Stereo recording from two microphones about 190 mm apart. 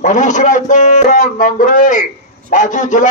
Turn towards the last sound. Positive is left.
turn(degrees=40)  # may be behind; listen again after turning